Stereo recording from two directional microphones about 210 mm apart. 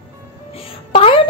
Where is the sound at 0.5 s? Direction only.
25° left (ahead or behind).